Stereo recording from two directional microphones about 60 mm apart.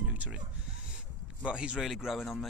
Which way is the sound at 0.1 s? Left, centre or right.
Right.